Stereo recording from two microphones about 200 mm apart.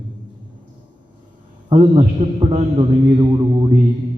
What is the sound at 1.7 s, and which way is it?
A man's voice, 25° right (ahead or behind).